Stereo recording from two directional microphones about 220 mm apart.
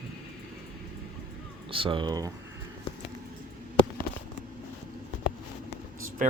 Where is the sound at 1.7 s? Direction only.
25° right (ahead or behind).